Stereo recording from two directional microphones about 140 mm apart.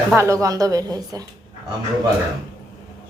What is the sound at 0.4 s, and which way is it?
Speech, 25° right (ahead or behind).